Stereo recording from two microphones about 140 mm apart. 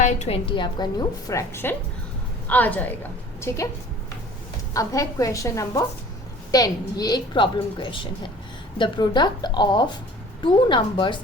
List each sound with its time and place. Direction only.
0.0 s a woman's voice: 55° left (ahead or behind)
0.4 s a woman's voice: 35° left (ahead or behind); by 2.9 s 10° left (ahead or behind)
4.7 s a woman's voice: 25° left (ahead or behind)